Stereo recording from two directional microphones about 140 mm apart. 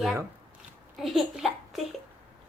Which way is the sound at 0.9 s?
Centre (ahead or behind).